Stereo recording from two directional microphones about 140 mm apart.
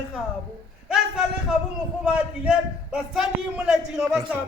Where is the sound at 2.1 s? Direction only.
5° right (ahead or behind).